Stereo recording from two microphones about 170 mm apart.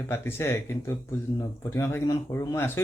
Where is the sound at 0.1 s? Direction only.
15° left (ahead or behind).